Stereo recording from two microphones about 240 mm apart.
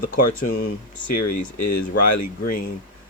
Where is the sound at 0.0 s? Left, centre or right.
Left.